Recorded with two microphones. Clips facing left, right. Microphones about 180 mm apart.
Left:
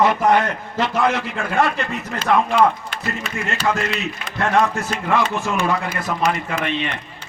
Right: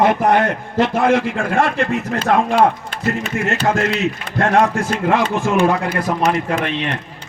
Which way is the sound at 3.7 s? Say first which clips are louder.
Right 3 dB; 50° right (ahead or behind).